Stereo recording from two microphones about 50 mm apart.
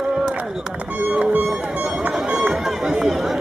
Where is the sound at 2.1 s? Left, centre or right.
Centre.